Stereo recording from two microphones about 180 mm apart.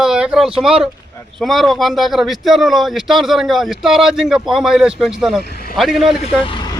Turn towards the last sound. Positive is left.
turn(degrees=30)  # may be behind; listen again after turning